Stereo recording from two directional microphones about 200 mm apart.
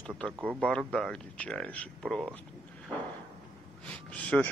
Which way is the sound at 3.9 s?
5° left (ahead or behind).